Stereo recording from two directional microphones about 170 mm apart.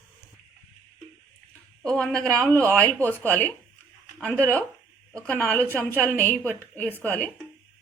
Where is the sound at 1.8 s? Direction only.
5° left (ahead or behind).